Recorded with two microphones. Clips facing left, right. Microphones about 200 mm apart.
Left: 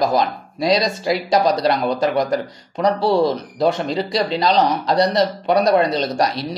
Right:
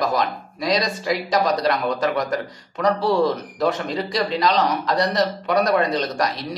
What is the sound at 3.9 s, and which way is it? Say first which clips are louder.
A man's voice: left 3 dB; 30° left (ahead or behind).